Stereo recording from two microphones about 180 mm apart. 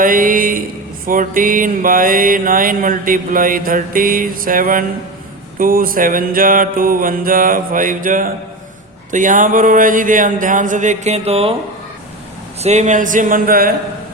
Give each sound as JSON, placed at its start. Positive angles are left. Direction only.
{"t": 0.0, "sound": "mantra", "side_deg": -50}
{"t": 12.6, "sound": "mantra", "side_deg": -40}